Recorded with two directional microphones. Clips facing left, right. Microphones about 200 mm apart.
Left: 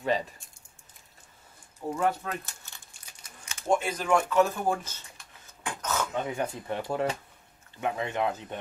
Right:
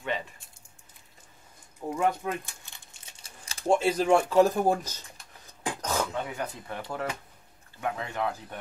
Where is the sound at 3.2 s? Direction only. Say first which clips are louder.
Even; 30° right (ahead or behind).